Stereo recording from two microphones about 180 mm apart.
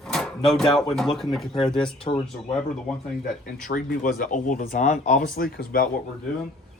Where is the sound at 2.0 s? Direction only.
30° left (ahead or behind).